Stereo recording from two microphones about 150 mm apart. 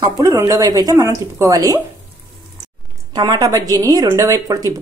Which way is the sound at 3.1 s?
25° right (ahead or behind).